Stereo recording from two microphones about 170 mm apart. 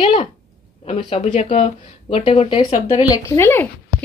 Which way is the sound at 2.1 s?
35° left (ahead or behind).